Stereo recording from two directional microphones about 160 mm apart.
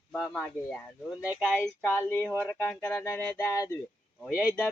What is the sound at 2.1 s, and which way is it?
Speech, 10° left (ahead or behind).